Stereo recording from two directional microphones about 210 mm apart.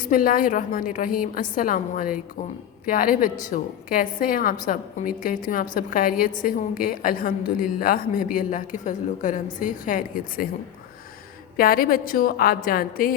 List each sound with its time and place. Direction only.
0.0 s a woman's voice: 40° left (ahead or behind)
11.5 s a woman's voice: 45° left (ahead or behind)